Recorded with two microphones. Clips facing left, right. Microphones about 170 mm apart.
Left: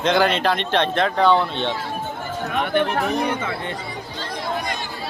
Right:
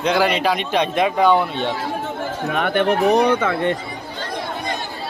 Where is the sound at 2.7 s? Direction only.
70° right (ahead or behind).